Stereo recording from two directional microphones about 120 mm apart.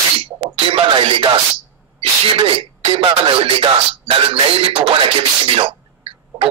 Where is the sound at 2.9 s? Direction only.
50° right (ahead or behind).